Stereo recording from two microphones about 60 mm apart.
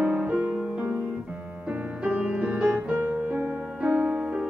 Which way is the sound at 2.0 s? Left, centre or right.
Right.